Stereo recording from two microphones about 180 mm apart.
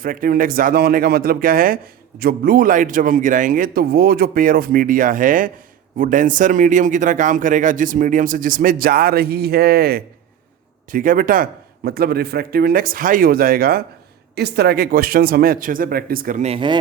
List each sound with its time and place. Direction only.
0.0 s speech: 50° right (ahead or behind)
16.5 s speech: 30° right (ahead or behind)